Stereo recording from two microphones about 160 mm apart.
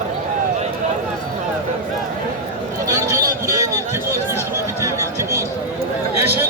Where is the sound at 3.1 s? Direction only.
20° right (ahead or behind).